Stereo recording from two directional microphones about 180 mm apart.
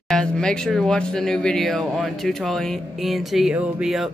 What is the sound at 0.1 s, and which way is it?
Speech, 5° left (ahead or behind).